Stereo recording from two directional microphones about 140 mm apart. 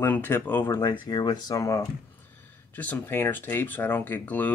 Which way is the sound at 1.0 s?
30° left (ahead or behind).